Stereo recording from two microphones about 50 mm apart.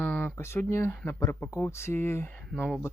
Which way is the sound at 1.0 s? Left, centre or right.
Left.